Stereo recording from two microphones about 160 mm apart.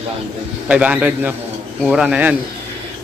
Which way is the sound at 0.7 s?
5° right (ahead or behind).